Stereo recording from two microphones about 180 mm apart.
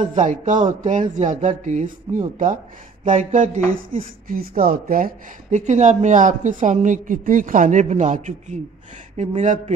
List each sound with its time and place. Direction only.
0.0 s speech: 45° right (ahead or behind)